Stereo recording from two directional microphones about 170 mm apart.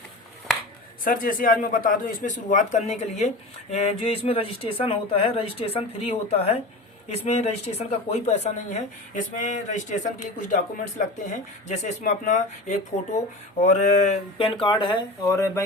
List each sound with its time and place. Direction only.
1.0 s speech: 55° left (ahead or behind)
14.4 s speech: 30° left (ahead or behind)
15.2 s speech: 20° left (ahead or behind)